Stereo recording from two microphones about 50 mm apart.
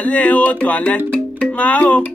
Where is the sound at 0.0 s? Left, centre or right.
Left.